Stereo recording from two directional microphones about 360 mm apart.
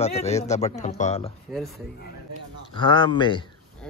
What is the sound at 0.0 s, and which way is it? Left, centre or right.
Speech, centre.